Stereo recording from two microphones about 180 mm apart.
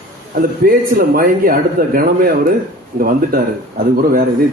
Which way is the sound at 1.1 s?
55° right (ahead or behind).